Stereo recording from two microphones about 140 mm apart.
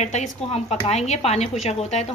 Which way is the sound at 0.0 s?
55° left (ahead or behind).